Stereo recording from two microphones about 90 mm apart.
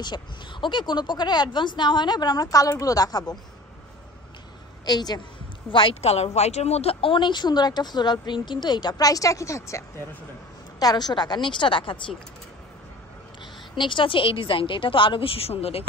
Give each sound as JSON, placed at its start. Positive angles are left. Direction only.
{"t": 0.0, "sound": "speech", "side_deg": 60}
{"t": 4.8, "sound": "speech", "side_deg": 50}
{"t": 5.7, "sound": "a woman's voice", "side_deg": 75}
{"t": 10.8, "sound": "a woman's voice", "side_deg": 50}
{"t": 13.7, "sound": "a woman's voice", "side_deg": 65}